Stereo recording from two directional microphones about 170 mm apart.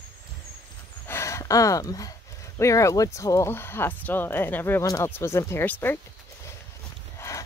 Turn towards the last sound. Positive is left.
turn(degrees=20)  # may be behind; listen again after turning